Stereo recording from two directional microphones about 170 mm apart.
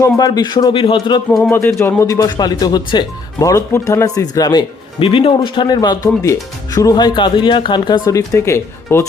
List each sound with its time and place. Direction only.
0.0 s speech: 20° left (ahead or behind)
1.3 s speech: centre (ahead or behind)
1.8 s speech: 15° left (ahead or behind)